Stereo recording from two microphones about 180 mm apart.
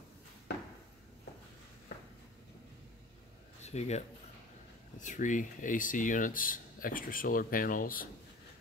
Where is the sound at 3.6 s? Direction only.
35° left (ahead or behind).